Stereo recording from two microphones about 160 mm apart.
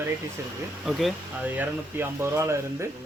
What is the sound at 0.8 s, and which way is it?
Speech, 5° right (ahead or behind).